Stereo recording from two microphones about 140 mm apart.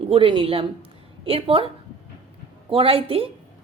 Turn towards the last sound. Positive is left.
turn(degrees=-40)  # may be behind; listen again after turning